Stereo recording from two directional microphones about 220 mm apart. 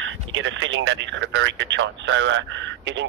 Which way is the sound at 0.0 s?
60° right (ahead or behind).